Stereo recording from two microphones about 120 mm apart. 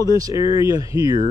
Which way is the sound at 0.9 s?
25° right (ahead or behind).